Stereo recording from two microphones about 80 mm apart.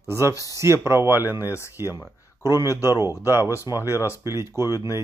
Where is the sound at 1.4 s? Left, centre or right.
Left.